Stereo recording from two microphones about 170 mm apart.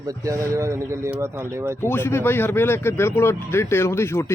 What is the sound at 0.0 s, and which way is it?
Speech, 20° right (ahead or behind).